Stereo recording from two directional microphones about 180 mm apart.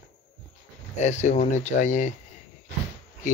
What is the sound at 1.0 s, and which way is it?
Speech, 40° left (ahead or behind).